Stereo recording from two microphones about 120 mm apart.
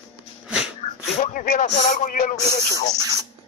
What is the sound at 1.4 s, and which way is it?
Speech, 90° left.